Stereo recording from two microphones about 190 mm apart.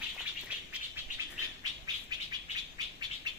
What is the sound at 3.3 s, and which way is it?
Bird, 20° right (ahead or behind).